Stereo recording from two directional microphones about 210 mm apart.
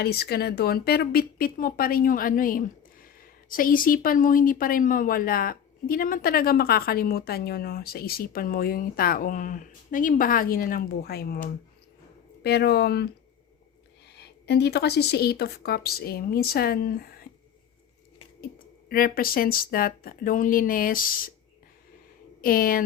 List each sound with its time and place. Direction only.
0.0 s speech: 50° left (ahead or behind)
14.1 s speech: 50° left (ahead or behind)
18.9 s speech: 45° left (ahead or behind)
22.4 s a woman's voice: 45° left (ahead or behind)